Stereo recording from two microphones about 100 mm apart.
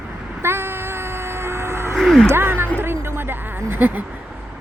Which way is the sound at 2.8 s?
25° right (ahead or behind).